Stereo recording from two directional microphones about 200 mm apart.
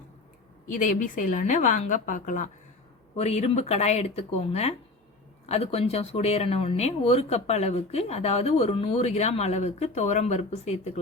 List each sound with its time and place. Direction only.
0.7 s speech: 40° left (ahead or behind)